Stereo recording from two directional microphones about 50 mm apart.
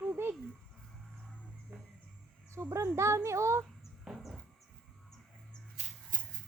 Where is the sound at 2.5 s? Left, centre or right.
Right.